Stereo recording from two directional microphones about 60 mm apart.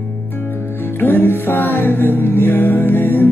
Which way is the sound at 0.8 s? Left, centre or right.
Left.